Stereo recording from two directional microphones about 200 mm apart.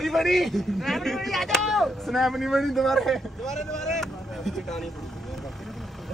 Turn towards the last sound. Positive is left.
turn(degrees=0)  # may be behind; listen again after turning